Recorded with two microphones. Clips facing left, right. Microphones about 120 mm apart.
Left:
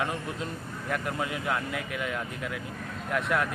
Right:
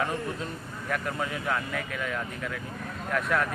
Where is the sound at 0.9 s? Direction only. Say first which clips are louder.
Even; 15° left (ahead or behind).